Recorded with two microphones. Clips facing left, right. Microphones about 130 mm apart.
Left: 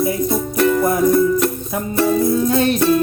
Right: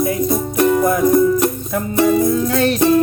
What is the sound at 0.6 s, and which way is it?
Music, 15° right (ahead or behind).